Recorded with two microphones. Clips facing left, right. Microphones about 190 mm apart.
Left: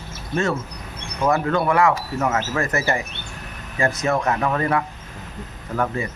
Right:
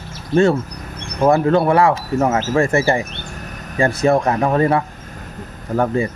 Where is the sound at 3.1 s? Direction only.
45° right (ahead or behind).